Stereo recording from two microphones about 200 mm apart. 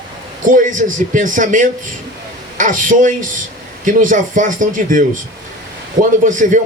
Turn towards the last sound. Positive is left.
turn(degrees=-40)  # may be behind; listen again after turning